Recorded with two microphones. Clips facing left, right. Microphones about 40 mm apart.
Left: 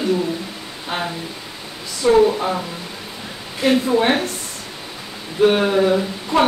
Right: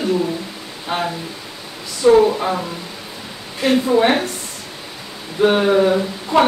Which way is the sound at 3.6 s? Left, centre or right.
Centre.